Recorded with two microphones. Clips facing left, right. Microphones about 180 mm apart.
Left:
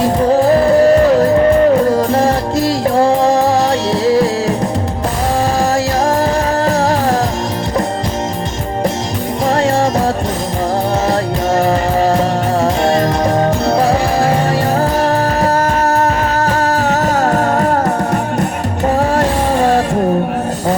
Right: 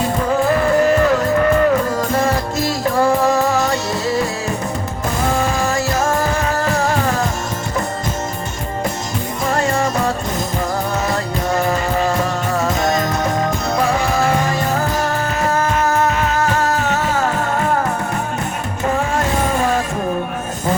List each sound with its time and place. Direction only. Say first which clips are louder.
0.3 s music: left 5 dB; 35° left (ahead or behind)
6.6 s music: left 4 dB; 35° left (ahead or behind)
9.5 s music: left 5 dB; 35° left (ahead or behind)
11.1 s music: left 5 dB; 35° left (ahead or behind)
18.9 s a sound: left 5 dB; 35° left (ahead or behind)